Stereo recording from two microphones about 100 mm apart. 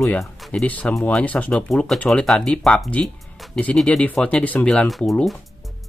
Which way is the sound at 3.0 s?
Centre (ahead or behind).